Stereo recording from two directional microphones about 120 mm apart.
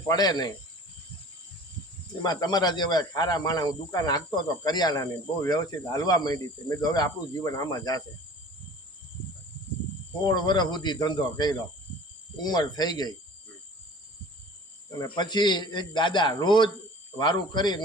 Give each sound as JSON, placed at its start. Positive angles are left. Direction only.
{"t": 0.1, "sound": "speech", "side_deg": 35}
{"t": 2.2, "sound": "speech", "side_deg": 35}
{"t": 10.2, "sound": "speech", "side_deg": 35}
{"t": 15.0, "sound": "speech", "side_deg": 40}